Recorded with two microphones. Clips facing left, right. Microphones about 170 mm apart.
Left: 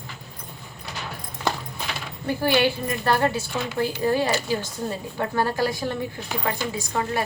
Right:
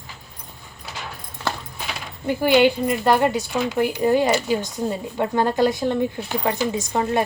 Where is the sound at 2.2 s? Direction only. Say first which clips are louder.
Right 5 dB; 20° right (ahead or behind).